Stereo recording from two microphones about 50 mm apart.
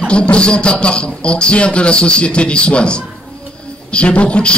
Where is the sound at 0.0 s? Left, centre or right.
Left.